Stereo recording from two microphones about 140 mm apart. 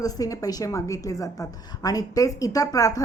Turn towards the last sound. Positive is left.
turn(degrees=25)  # may be behind; listen again after turning